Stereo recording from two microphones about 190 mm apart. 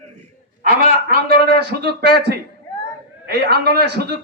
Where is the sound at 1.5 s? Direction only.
55° right (ahead or behind).